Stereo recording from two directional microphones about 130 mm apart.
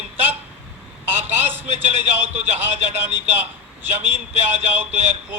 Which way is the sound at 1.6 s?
60° right (ahead or behind).